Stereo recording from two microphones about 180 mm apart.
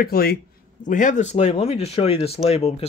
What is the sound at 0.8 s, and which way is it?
Speech, 45° left (ahead or behind).